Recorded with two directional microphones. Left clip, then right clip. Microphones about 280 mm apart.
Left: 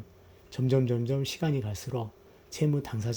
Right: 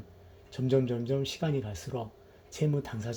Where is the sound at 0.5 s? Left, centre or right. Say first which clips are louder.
Even; left.